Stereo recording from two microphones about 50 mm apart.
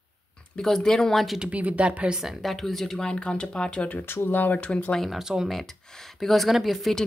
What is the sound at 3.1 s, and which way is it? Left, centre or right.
Speech, centre.